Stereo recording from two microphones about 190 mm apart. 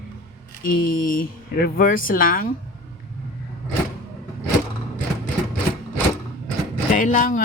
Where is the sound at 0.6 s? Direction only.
45° left (ahead or behind).